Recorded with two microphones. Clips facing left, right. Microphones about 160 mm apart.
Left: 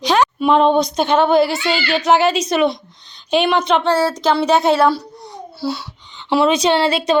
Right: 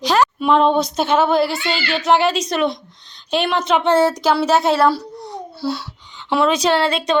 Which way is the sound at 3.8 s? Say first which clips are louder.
Right 2 dB; 20° right (ahead or behind).